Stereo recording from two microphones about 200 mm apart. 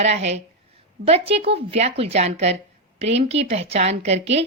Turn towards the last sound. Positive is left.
turn(degrees=-30)  # may be behind; listen again after turning